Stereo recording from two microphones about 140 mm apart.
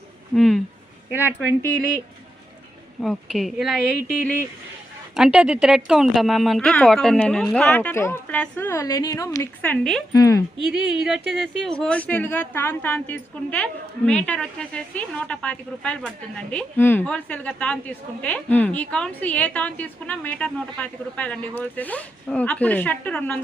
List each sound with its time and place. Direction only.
0.3 s a woman's voice: centre (ahead or behind)
3.0 s a woman's voice: centre (ahead or behind)
5.1 s a woman's voice: 5° right (ahead or behind); by 9.5 s 25° left (ahead or behind)
9.6 s a woman's voice: 5° left (ahead or behind)
10.1 s speech: 25° left (ahead or behind)
10.7 s a woman's voice: 5° right (ahead or behind)